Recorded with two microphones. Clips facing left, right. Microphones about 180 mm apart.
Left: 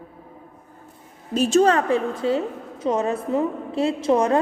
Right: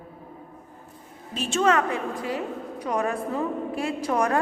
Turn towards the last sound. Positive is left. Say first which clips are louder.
# left 5 dB
turn(degrees=25)  # may be behind; listen again after turning